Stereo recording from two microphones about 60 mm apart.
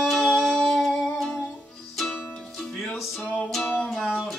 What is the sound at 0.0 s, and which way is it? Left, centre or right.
Music, centre.